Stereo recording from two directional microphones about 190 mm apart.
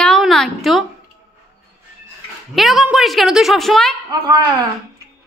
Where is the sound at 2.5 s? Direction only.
Centre (ahead or behind).